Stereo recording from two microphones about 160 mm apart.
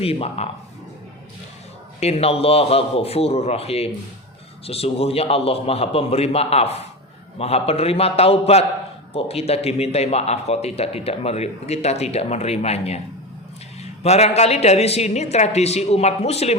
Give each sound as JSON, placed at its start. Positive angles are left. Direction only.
{"t": 0.0, "sound": "speech", "side_deg": 40}
{"t": 2.0, "sound": "speech", "side_deg": 40}
{"t": 14.0, "sound": "speech", "side_deg": 40}